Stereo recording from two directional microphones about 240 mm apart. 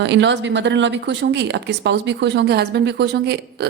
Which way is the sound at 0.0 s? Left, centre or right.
Right.